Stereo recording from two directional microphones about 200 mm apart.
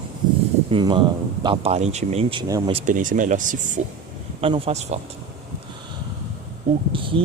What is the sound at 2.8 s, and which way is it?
Speech, 40° right (ahead or behind).